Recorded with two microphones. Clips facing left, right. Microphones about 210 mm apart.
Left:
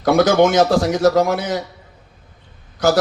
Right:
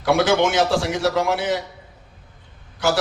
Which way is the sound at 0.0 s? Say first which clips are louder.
Left 4 dB; 40° left (ahead or behind).